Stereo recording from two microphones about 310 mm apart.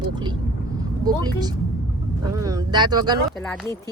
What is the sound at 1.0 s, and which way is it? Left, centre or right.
Speech, centre.